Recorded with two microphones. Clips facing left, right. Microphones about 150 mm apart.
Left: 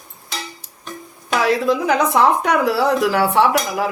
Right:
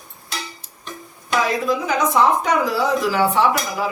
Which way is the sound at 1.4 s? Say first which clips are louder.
Left 7 dB; 65° left (ahead or behind).